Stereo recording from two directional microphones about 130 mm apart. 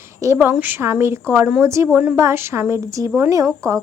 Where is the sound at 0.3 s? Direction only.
10° right (ahead or behind).